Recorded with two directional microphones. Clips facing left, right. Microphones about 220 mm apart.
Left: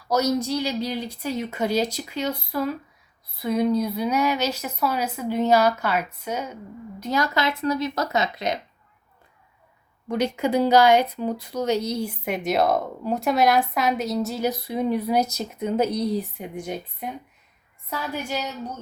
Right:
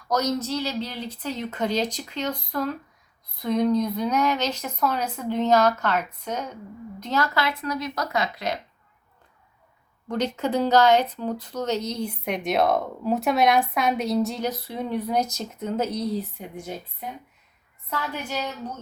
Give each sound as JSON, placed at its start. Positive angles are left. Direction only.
{"t": 0.0, "sound": "speech", "side_deg": 10}
{"t": 10.1, "sound": "speech", "side_deg": 10}